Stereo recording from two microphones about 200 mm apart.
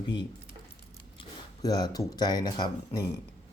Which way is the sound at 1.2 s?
20° left (ahead or behind).